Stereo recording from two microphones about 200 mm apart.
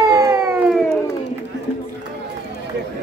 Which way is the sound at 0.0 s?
15° right (ahead or behind).